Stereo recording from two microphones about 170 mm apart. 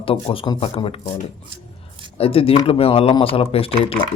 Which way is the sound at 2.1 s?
35° left (ahead or behind).